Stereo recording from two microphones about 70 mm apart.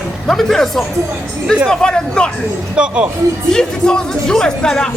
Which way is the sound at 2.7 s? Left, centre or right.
Centre.